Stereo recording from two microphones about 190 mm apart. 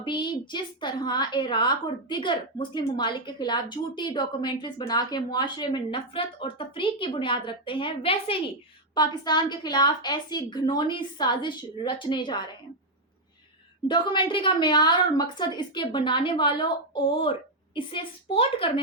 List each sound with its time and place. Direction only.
0.0 s a woman's voice: 25° left (ahead or behind)
13.8 s a woman's voice: 25° left (ahead or behind)